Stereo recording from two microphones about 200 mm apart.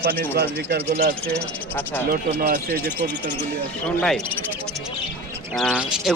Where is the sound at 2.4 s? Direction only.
45° right (ahead or behind).